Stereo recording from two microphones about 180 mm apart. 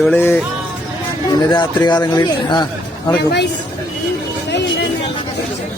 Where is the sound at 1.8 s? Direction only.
20° left (ahead or behind).